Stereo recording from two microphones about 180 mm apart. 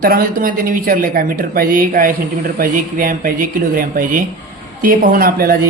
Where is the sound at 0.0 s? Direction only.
55° right (ahead or behind).